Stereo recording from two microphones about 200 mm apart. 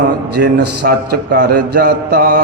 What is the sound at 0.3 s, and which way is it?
Speech, 55° right (ahead or behind).